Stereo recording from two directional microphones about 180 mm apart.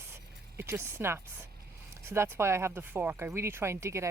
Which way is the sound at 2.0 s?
15° right (ahead or behind).